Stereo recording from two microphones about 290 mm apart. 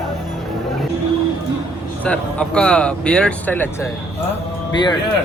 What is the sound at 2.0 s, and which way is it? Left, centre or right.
Speech, centre.